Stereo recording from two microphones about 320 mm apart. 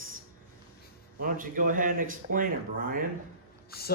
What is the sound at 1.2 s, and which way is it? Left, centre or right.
Speech, right.